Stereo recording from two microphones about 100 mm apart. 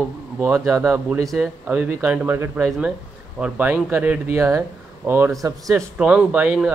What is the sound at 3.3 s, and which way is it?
Speech, 15° right (ahead or behind).